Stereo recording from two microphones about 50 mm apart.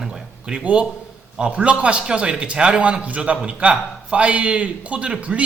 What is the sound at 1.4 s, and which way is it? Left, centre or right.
Speech, right.